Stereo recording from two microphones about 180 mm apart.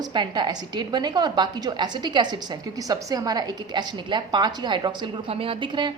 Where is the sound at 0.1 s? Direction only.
25° right (ahead or behind).